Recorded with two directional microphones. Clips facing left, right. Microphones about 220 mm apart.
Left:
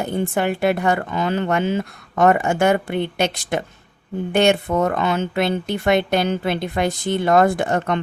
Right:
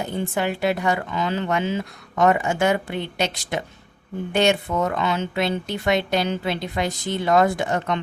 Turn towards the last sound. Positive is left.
turn(degrees=50)  # may be behind; listen again after turning